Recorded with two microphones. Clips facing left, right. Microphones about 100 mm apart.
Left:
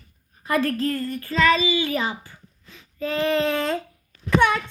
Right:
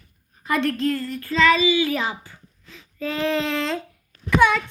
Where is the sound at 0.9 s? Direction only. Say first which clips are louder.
Right 1 dB; centre (ahead or behind).